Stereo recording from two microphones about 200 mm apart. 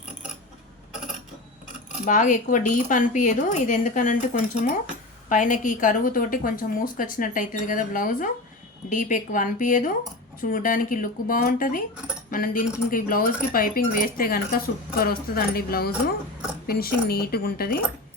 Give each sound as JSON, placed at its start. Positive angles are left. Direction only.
{"t": 1.6, "sound": "a woman's voice", "side_deg": 40}